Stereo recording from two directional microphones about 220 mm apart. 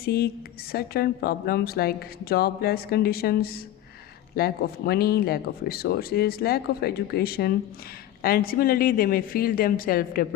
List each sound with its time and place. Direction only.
0.0 s a woman's voice: 45° left (ahead or behind)